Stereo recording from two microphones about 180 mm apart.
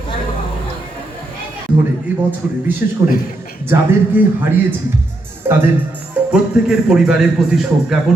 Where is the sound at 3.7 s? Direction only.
15° right (ahead or behind).